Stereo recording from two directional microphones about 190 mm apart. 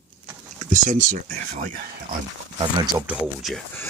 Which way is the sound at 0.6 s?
45° right (ahead or behind).